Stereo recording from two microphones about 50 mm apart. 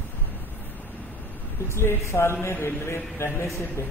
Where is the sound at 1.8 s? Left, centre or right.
Left.